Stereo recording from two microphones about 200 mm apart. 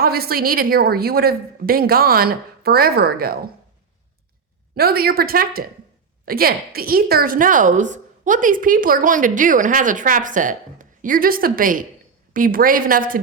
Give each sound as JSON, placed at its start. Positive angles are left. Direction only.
{"t": 0.0, "sound": "a woman's voice", "side_deg": -50}
{"t": 4.7, "sound": "a woman's voice", "side_deg": -50}